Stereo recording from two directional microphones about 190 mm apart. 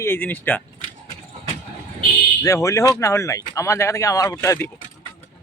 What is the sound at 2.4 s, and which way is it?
Speech, 15° left (ahead or behind).